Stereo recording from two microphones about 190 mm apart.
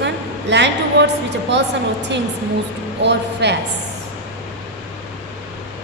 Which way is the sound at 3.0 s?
65° right (ahead or behind).